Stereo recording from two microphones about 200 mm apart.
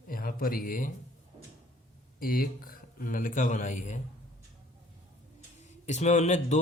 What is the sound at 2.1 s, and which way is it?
Speech, 45° left (ahead or behind).